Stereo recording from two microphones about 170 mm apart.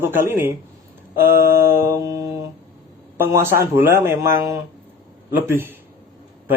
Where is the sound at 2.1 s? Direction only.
20° right (ahead or behind).